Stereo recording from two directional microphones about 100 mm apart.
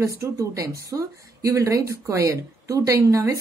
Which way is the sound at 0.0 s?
30° right (ahead or behind).